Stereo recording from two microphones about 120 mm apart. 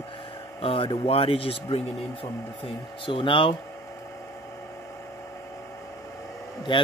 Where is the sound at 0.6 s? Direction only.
50° left (ahead or behind).